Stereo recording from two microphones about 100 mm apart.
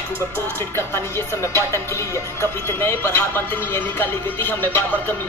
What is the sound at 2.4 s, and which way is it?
Speech, 25° left (ahead or behind).